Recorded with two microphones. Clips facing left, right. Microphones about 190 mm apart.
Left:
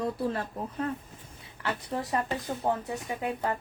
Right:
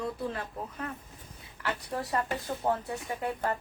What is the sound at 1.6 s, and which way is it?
A woman's voice, 25° left (ahead or behind).